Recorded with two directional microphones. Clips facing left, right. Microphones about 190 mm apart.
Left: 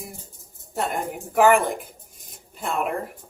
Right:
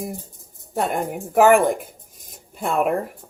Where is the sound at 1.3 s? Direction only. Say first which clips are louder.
Right 3 dB; 45° right (ahead or behind).